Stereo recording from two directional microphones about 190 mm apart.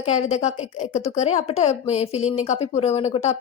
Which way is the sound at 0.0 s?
35° left (ahead or behind).